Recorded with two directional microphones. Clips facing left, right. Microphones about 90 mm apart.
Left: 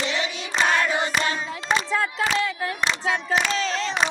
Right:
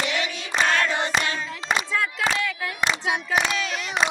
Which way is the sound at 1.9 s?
30° left (ahead or behind).